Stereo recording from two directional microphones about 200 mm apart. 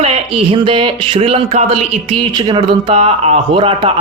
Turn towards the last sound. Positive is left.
turn(degrees=-25)  # may be behind; listen again after turning